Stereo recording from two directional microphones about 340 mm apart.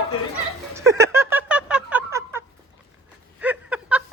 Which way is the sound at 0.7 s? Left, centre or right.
Centre.